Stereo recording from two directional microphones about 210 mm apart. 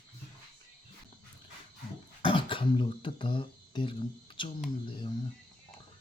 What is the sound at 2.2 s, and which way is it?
Speech, 25° left (ahead or behind).